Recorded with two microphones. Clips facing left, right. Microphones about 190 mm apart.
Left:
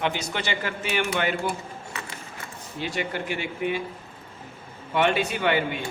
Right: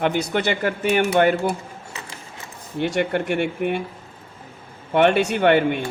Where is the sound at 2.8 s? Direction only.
60° right (ahead or behind).